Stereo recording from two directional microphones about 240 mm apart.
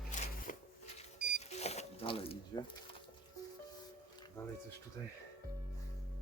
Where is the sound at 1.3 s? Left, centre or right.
Left.